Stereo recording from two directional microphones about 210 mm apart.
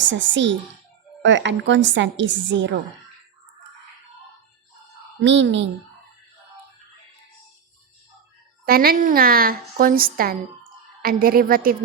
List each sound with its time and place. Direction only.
0.0 s a woman's voice: 60° right (ahead or behind)
5.2 s a woman's voice: 60° right (ahead or behind)
8.6 s a woman's voice: 45° right (ahead or behind)